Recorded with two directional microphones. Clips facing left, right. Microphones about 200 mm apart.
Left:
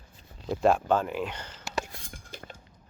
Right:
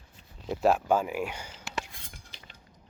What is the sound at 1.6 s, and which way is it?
Whispering, 40° left (ahead or behind).